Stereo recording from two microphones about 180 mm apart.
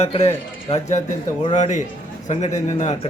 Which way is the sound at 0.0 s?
35° left (ahead or behind).